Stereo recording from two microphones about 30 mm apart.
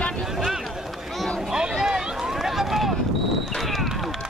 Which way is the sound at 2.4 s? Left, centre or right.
Centre.